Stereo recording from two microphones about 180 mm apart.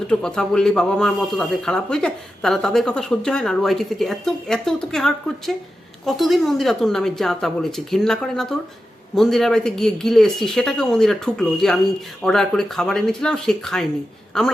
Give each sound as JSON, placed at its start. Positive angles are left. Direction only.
{"t": 0.1, "sound": "speech", "side_deg": 5}